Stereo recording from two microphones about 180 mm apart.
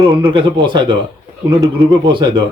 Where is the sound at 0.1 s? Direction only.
30° right (ahead or behind).